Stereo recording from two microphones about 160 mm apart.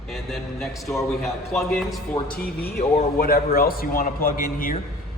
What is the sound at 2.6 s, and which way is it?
A man's voice, 75° left (ahead or behind).